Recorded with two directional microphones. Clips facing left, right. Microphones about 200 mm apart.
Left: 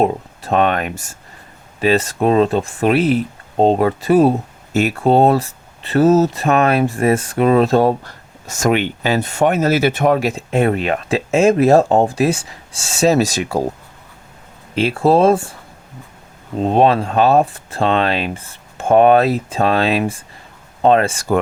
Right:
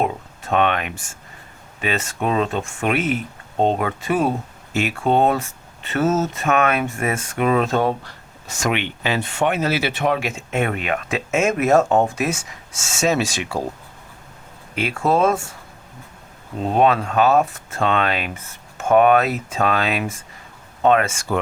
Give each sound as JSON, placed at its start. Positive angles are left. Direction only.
{"t": 0.0, "sound": "speech", "side_deg": 35}
{"t": 14.8, "sound": "speech", "side_deg": 30}
{"t": 16.6, "sound": "speech", "side_deg": 30}